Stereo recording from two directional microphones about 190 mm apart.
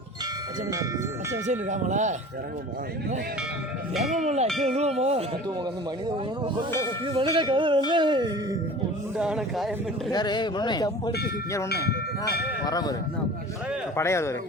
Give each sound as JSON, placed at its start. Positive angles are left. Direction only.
{"t": 1.5, "sound": "speech", "side_deg": -40}
{"t": 3.9, "sound": "speech", "side_deg": -35}
{"t": 6.1, "sound": "music", "side_deg": -25}
{"t": 9.1, "sound": "speech", "side_deg": -5}
{"t": 10.1, "sound": "speech", "side_deg": 20}
{"t": 11.7, "sound": "tubular bells", "side_deg": 55}
{"t": 12.6, "sound": "speech", "side_deg": 20}